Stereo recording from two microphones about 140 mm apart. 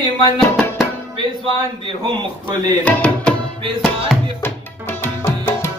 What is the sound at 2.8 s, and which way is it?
Tabla, 10° left (ahead or behind).